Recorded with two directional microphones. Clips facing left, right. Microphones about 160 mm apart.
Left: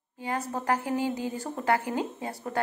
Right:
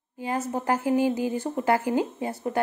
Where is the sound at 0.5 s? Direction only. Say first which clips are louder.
Right 5 dB; 25° right (ahead or behind).